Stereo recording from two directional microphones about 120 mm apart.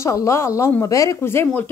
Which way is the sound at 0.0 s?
25° left (ahead or behind).